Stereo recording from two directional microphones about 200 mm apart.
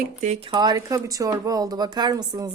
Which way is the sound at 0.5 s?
20° right (ahead or behind).